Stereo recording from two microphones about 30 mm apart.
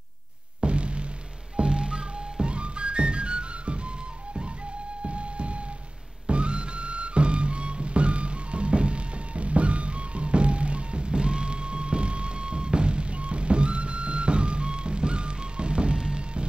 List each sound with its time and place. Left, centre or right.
0.6 s music: right
5.0 s music: right